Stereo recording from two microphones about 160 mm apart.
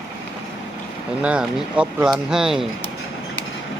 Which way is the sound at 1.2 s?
5° right (ahead or behind).